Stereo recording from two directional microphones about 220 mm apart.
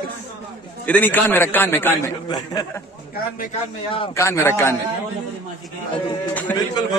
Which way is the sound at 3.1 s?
40° left (ahead or behind).